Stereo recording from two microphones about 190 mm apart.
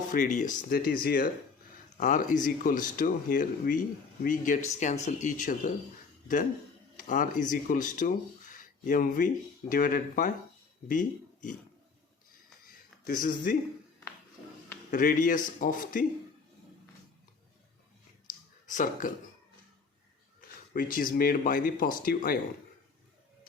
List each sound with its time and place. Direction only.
0.1 s speech: 40° left (ahead or behind)
6.9 s speech: 45° left (ahead or behind)
13.1 s speech: 45° left (ahead or behind)
14.8 s speech: 45° left (ahead or behind)
18.6 s speech: 40° left (ahead or behind)
20.7 s speech: 45° left (ahead or behind)